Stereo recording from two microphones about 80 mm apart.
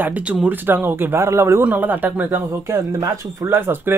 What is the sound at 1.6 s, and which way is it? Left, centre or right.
Speech, right.